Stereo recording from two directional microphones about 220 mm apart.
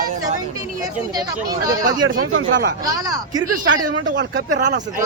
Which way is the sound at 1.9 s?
40° right (ahead or behind).